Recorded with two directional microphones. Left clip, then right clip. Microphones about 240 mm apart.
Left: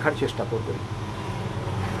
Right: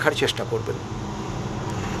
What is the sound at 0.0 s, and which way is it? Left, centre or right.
Speech, right.